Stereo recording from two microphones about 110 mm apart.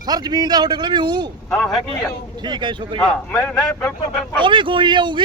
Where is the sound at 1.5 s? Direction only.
Centre (ahead or behind).